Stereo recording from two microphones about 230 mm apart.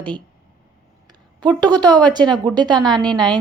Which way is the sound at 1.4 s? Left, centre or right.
Centre.